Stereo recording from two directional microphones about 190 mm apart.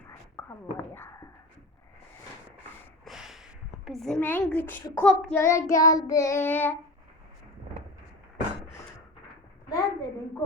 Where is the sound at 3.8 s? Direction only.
Centre (ahead or behind).